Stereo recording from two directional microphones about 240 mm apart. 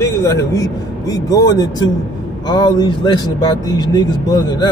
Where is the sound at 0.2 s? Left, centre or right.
Centre.